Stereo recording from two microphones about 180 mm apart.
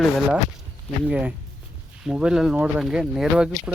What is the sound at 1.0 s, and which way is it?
Speech, 5° right (ahead or behind).